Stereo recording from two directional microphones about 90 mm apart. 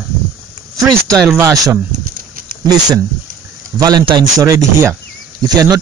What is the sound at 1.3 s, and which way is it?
Speech, 40° right (ahead or behind).